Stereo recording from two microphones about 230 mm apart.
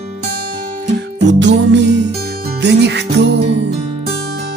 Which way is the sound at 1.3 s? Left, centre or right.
Right.